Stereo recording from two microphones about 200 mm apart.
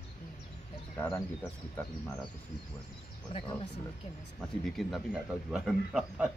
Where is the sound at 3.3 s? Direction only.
30° left (ahead or behind).